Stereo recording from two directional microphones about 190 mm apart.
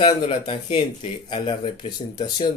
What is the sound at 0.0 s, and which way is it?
Speech, 25° left (ahead or behind).